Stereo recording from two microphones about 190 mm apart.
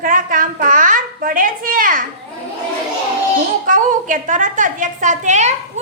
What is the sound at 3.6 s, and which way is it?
A woman's voice, 45° right (ahead or behind).